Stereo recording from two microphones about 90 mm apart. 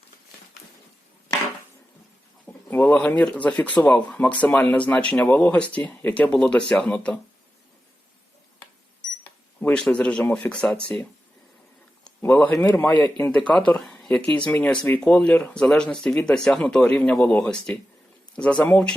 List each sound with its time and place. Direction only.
2.5 s speech: 20° left (ahead or behind)
9.7 s speech: 10° left (ahead or behind)
12.2 s speech: 15° left (ahead or behind)